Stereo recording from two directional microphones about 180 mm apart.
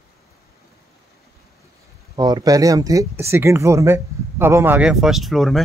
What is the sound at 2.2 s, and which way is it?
Speech, 20° right (ahead or behind).